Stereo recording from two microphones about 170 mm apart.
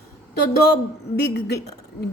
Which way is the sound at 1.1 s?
70° left (ahead or behind).